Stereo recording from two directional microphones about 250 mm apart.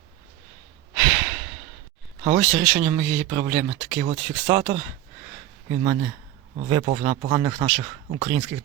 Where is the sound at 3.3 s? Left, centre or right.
Centre.